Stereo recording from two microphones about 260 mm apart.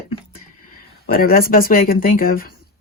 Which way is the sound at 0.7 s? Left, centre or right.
Left.